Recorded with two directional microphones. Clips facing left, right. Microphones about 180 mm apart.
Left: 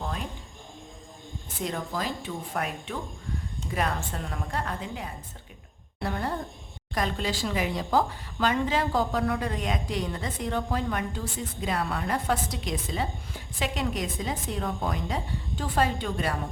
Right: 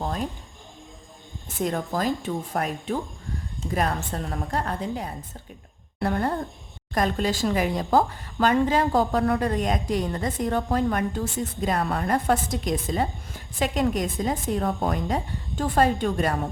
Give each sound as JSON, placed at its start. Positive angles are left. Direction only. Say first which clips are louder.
{"t": 0.0, "sound": "a sound", "louder": "right 6 dB", "side_deg": -40}
{"t": 1.6, "sound": "a woman's voice", "louder": "right 6 dB", "side_deg": -45}
{"t": 6.0, "sound": "a woman's voice", "louder": "right 5 dB", "side_deg": -50}